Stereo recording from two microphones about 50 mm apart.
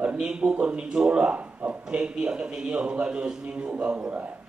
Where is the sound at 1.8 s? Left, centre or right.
Centre.